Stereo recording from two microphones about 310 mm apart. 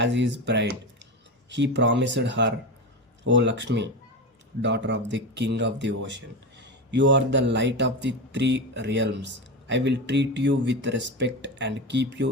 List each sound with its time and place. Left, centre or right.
0.0 s speech: right